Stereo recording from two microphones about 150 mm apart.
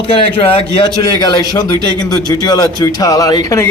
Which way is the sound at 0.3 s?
35° left (ahead or behind).